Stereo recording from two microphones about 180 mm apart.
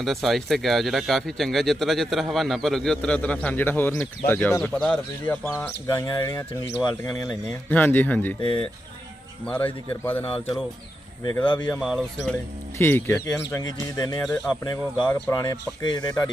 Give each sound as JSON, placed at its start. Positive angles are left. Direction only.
{"t": 0.0, "sound": "a man's voice", "side_deg": 0}
{"t": 8.4, "sound": "speech", "side_deg": 25}
{"t": 10.2, "sound": "speech", "side_deg": 30}
{"t": 11.5, "sound": "speech", "side_deg": 5}
{"t": 11.8, "sound": "a man's voice", "side_deg": -5}
{"t": 12.7, "sound": "speech", "side_deg": 10}
{"t": 15.0, "sound": "speech", "side_deg": 5}
{"t": 15.3, "sound": "speech", "side_deg": 20}